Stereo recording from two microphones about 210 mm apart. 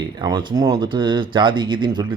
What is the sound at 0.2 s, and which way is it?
A man's voice, 20° right (ahead or behind).